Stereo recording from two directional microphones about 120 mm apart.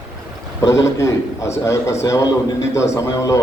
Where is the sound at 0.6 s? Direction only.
25° left (ahead or behind).